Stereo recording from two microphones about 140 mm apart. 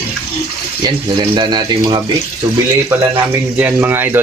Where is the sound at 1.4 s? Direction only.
35° right (ahead or behind).